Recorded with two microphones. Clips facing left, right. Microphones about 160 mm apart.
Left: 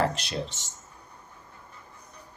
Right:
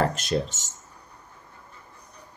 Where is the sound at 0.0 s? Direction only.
45° right (ahead or behind).